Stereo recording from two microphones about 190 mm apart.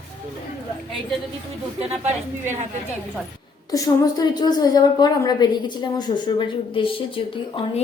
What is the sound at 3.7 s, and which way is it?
A woman's voice, 20° left (ahead or behind).